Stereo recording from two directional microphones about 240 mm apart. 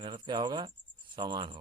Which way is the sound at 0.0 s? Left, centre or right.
Centre.